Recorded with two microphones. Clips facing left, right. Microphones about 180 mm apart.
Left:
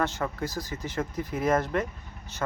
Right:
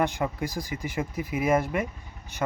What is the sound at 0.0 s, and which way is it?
Speech, 15° right (ahead or behind).